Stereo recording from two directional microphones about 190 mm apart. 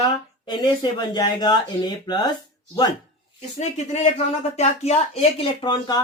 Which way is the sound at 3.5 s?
35° left (ahead or behind).